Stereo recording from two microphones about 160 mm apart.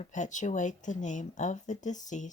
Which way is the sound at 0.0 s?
50° left (ahead or behind).